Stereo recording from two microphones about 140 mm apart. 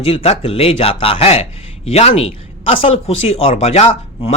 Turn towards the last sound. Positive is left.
turn(degrees=45)  # may be behind; listen again after turning